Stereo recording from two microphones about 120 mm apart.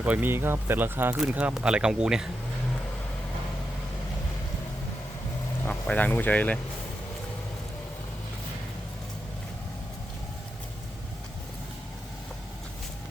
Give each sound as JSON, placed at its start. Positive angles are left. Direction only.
{"t": 0.0, "sound": "speech", "side_deg": -15}
{"t": 5.6, "sound": "speech", "side_deg": 15}